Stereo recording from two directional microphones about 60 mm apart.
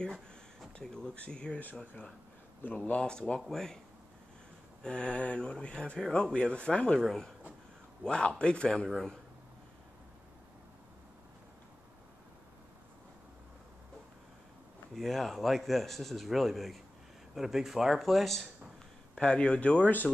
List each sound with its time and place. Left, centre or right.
0.7 s a man's voice: centre
2.6 s speech: left
3.0 s a man's voice: centre
4.8 s a man's voice: centre
7.1 s a man's voice: centre
8.0 s a man's voice: centre
15.0 s a man's voice: centre
19.1 s speech: centre